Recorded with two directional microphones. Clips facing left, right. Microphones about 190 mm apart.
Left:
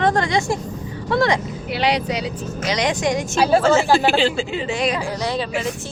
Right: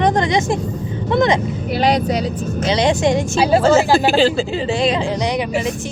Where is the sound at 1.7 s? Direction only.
45° right (ahead or behind).